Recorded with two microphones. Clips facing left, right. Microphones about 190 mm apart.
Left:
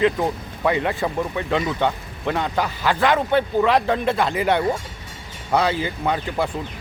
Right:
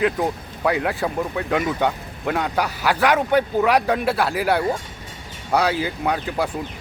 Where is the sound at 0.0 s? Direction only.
5° right (ahead or behind).